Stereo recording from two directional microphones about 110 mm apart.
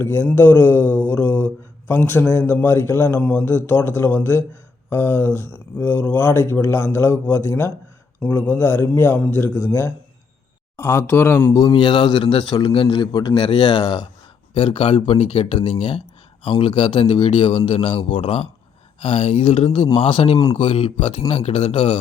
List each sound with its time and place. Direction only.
0.0 s a man's voice: 20° left (ahead or behind)
1.0 s mantra: 20° left (ahead or behind)
1.9 s a man's voice: 20° left (ahead or behind)
11.7 s a man's voice: 50° left (ahead or behind)
14.5 s speech: 55° left (ahead or behind)